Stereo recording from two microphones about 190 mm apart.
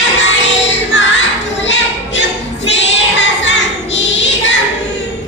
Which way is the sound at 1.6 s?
70° left (ahead or behind).